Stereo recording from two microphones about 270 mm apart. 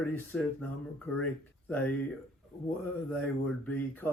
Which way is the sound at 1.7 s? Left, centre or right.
Centre.